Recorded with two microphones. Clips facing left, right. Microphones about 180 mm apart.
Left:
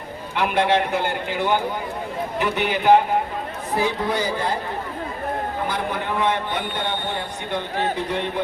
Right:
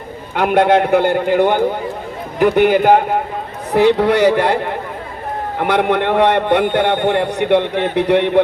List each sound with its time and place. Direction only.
0.3 s a man's voice: 55° right (ahead or behind)
3.8 s a man's voice: 75° right (ahead or behind)